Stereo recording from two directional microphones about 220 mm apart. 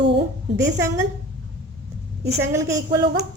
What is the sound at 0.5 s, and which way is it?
Speech, 15° right (ahead or behind).